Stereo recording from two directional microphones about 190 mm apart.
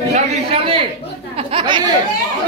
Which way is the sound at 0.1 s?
30° right (ahead or behind).